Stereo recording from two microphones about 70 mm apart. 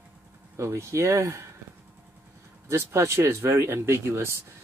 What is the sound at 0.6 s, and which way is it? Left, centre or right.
Speech, right.